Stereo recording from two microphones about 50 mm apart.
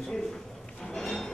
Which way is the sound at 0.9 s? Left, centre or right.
Centre.